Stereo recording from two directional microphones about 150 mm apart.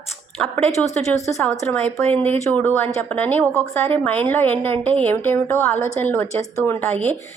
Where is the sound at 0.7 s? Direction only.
50° left (ahead or behind).